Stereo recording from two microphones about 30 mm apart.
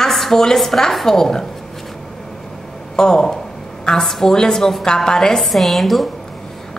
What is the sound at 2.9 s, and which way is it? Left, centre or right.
A woman's voice, left.